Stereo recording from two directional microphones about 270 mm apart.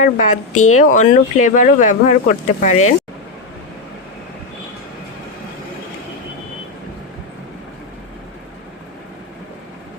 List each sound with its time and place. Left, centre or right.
0.0 s speech: left
0.5 s speech: left
0.8 s speech: left